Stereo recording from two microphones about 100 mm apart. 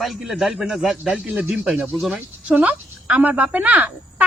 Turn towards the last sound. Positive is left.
turn(degrees=-15)  # may be behind; listen again after turning